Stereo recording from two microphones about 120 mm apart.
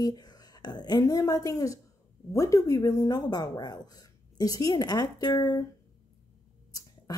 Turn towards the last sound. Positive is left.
turn(degrees=35)  # may be behind; listen again after turning